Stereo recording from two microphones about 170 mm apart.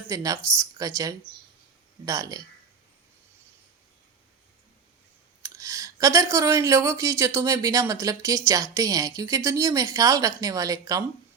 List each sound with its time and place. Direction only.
0.1 s speech: 20° right (ahead or behind)
5.4 s speech: 20° right (ahead or behind)